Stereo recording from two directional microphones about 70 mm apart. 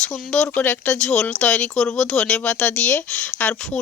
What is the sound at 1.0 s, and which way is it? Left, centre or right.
Speech, centre.